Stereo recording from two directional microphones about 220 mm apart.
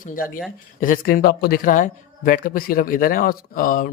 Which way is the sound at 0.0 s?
40° left (ahead or behind).